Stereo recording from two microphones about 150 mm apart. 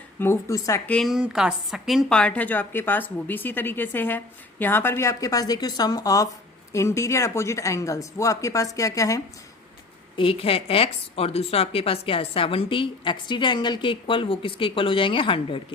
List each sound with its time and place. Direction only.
0.2 s speech: 20° left (ahead or behind)
0.9 s a woman's voice: 5° left (ahead or behind); by 9.2 s 20° left (ahead or behind)
10.2 s a woman's voice: 35° left (ahead or behind)